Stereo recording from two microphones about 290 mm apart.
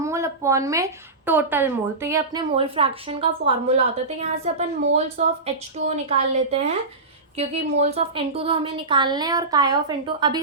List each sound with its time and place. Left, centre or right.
0.0 s a woman's voice: centre